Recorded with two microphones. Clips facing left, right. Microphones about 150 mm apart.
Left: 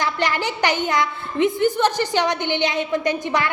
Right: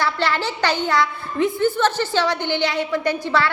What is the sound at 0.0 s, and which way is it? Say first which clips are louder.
A woman's voice: right 1 dB; 15° left (ahead or behind).